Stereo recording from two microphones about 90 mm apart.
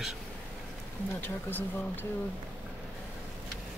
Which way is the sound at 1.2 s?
25° left (ahead or behind).